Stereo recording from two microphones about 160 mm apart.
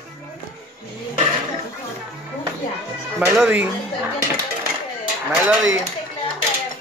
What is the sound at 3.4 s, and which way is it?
Speech, 10° right (ahead or behind).